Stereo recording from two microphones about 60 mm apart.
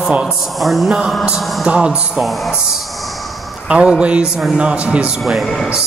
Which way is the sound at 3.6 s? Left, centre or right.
Centre.